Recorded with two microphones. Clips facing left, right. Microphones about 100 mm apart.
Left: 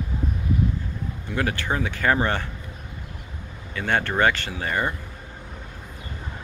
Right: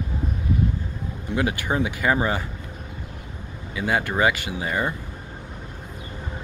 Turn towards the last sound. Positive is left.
turn(degrees=-10)  # may be behind; listen again after turning